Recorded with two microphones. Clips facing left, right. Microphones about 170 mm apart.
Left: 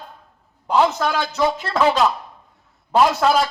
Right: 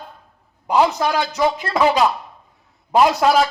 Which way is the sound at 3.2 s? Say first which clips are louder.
Right 1 dB; 15° right (ahead or behind).